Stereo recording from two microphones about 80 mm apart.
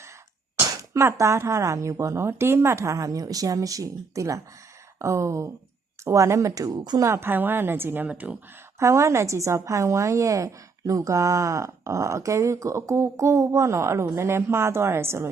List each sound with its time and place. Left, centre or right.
0.6 s a sound: right
1.2 s a woman's voice: right
7.0 s a woman's voice: right
8.8 s a woman's voice: right